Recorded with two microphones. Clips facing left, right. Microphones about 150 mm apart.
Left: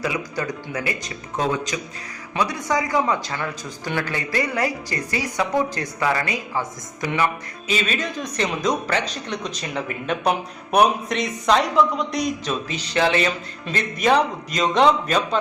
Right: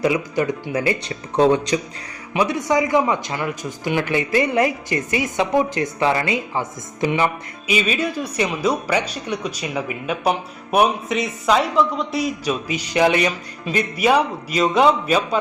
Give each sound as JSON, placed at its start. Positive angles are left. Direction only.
{"t": 0.0, "sound": "a man's voice", "side_deg": -25}
{"t": 2.3, "sound": "a man's voice", "side_deg": -15}
{"t": 7.7, "sound": "speech", "side_deg": -10}